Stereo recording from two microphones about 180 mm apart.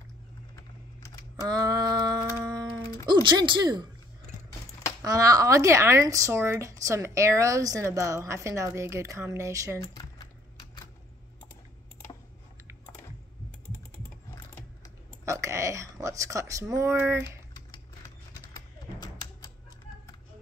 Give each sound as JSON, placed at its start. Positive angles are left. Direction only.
{"t": 1.4, "sound": "a sound", "side_deg": -20}
{"t": 3.1, "sound": "speech", "side_deg": -25}
{"t": 5.0, "sound": "speech", "side_deg": -20}
{"t": 9.8, "sound": "speech", "side_deg": 25}
{"t": 15.2, "sound": "speech", "side_deg": -15}
{"t": 18.5, "sound": "typewriter", "side_deg": 20}